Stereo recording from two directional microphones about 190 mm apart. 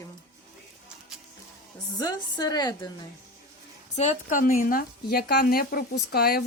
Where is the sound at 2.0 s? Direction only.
20° left (ahead or behind).